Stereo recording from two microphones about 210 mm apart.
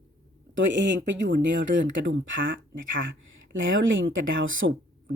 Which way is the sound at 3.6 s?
65° right (ahead or behind).